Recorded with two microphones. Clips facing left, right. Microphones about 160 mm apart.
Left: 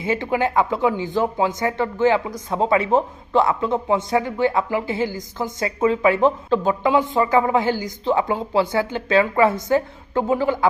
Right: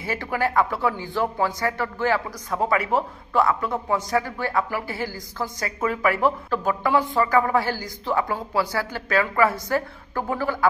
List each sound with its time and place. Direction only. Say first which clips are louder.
0.0 s speech: left 4 dB; 20° left (ahead or behind)